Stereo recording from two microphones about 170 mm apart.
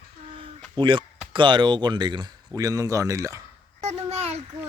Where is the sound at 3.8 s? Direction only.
40° right (ahead or behind).